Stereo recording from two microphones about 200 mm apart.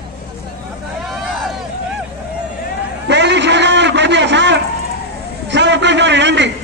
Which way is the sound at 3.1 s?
60° right (ahead or behind).